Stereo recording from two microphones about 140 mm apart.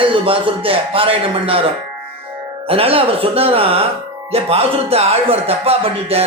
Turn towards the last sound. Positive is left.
turn(degrees=-45)  # may be behind; listen again after turning